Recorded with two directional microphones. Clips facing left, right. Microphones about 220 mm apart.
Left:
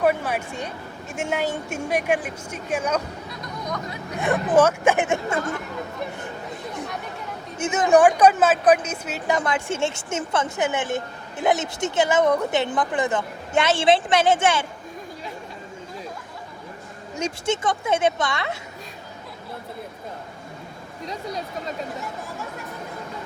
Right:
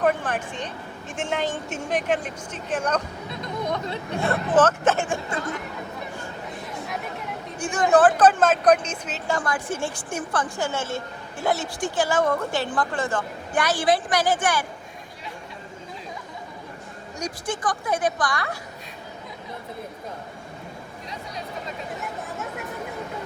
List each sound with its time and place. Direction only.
0.0 s a sound: 10° left (ahead or behind)
1.1 s speech: 10° left (ahead or behind)
3.2 s chatter: 25° right (ahead or behind)
4.2 s speech: 15° left (ahead or behind)
5.0 s a sound: 25° left (ahead or behind)
7.6 s a woman's voice: 20° left (ahead or behind)
17.2 s a woman's voice: 25° left (ahead or behind)